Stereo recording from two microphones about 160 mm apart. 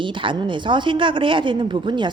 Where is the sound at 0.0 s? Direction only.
30° right (ahead or behind).